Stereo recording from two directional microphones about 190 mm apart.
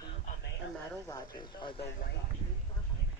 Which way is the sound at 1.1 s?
25° left (ahead or behind).